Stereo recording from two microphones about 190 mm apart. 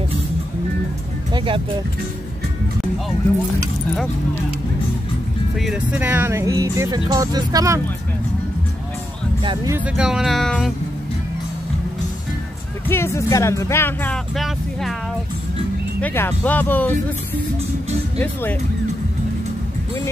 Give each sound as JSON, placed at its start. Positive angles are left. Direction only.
{"t": 1.3, "sound": "speech", "side_deg": -25}
{"t": 5.6, "sound": "speech", "side_deg": -5}
{"t": 9.4, "sound": "speech", "side_deg": -25}
{"t": 9.9, "sound": "speech", "side_deg": -5}
{"t": 12.8, "sound": "speech", "side_deg": 10}
{"t": 16.0, "sound": "speech", "side_deg": 10}
{"t": 18.2, "sound": "speech", "side_deg": 10}